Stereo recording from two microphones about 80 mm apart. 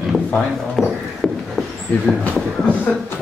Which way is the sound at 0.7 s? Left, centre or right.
Centre.